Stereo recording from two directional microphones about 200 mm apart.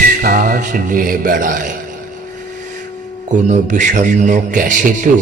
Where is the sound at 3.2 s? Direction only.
40° right (ahead or behind).